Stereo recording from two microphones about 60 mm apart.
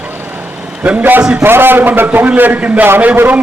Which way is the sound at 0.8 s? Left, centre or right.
Right.